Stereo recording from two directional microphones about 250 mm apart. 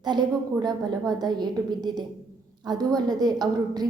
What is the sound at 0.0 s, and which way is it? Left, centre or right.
A woman's voice, centre.